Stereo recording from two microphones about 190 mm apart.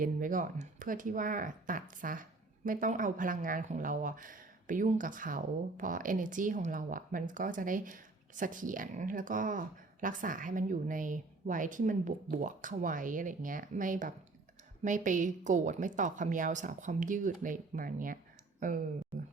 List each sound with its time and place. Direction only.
0.0 s a woman's voice: 45° right (ahead or behind)